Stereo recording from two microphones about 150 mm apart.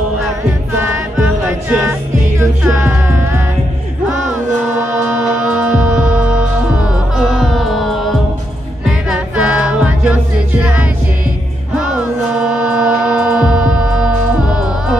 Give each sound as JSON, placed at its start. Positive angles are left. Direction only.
{"t": 1.7, "sound": "music", "side_deg": -15}
{"t": 5.0, "sound": "heart sounds", "side_deg": -10}
{"t": 8.8, "sound": "music", "side_deg": -5}